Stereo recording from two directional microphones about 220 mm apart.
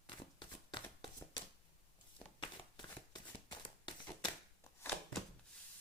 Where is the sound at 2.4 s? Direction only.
20° left (ahead or behind).